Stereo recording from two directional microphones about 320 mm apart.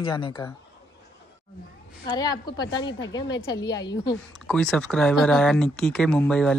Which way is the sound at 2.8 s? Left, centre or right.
Left.